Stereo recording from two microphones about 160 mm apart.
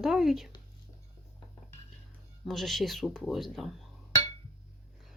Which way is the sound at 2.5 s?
Centre (ahead or behind).